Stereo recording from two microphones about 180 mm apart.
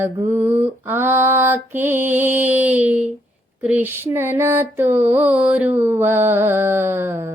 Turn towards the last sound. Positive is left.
turn(degrees=-15)  # may be behind; listen again after turning